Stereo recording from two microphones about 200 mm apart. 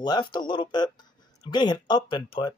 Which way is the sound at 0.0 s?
20° left (ahead or behind).